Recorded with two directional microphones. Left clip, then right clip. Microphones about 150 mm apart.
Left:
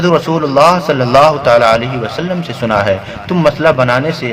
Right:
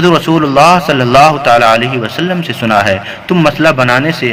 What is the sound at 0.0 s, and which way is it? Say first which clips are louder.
A man's voice: right 3 dB; 15° right (ahead or behind).